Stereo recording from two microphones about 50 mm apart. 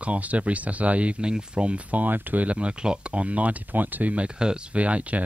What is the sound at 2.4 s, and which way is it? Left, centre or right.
Speech, right.